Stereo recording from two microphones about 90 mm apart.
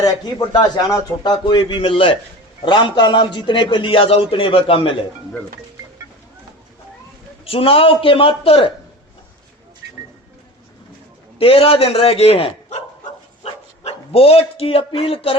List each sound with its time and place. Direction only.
0.0 s a man's voice: 45° left (ahead or behind); by 2.1 s 85° left
2.6 s a man's voice: 60° left (ahead or behind); by 4.9 s 90° left
7.4 s a man's voice: 90° left
11.3 s a man's voice: 90° left